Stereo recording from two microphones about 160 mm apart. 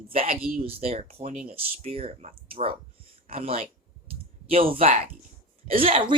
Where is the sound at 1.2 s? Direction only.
55° right (ahead or behind).